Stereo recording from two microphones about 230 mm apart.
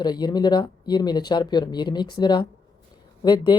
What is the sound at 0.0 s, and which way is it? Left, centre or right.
Speech, centre.